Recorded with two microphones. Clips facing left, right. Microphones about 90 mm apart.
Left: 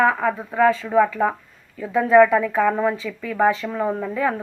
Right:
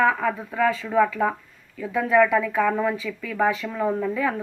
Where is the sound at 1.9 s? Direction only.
35° left (ahead or behind).